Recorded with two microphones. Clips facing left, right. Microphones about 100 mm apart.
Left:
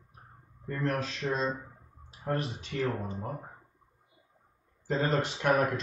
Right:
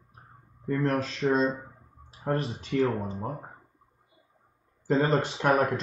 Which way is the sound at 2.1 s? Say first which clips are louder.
Right 3 dB; 35° right (ahead or behind).